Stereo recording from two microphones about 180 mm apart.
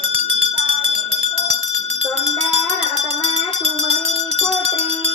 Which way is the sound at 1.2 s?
35° right (ahead or behind).